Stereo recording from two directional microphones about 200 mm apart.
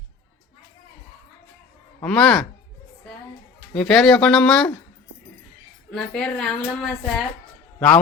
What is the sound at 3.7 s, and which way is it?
Speech, 5° left (ahead or behind).